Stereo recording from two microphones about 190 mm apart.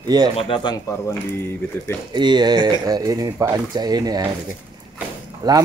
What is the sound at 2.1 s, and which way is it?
Speech, 25° right (ahead or behind).